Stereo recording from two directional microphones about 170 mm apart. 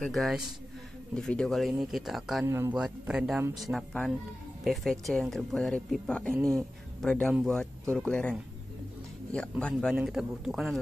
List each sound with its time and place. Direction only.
0.0 s speech: centre (ahead or behind)
2.4 s speech: 15° right (ahead or behind)
2.8 s speech: 5° right (ahead or behind)
6.3 s speech: 20° right (ahead or behind)
7.0 s speech: centre (ahead or behind)